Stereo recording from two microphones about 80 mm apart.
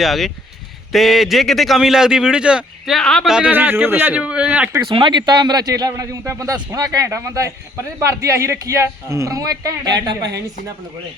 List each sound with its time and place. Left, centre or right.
0.0 s speech: centre
2.9 s speech: centre
3.4 s a man's voice: right
4.2 s speech: centre
4.9 s a man's voice: right